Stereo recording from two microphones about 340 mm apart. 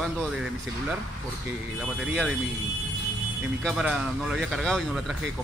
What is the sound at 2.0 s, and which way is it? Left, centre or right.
Speech, centre.